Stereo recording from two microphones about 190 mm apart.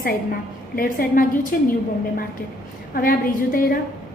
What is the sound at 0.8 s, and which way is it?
Speech, 50° left (ahead or behind).